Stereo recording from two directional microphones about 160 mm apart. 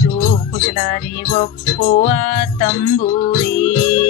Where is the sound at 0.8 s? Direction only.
45° left (ahead or behind).